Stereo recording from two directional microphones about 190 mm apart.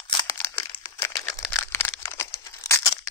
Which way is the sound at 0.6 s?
15° left (ahead or behind).